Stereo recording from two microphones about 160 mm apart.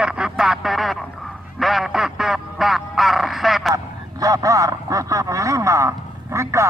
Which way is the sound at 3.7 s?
20° right (ahead or behind).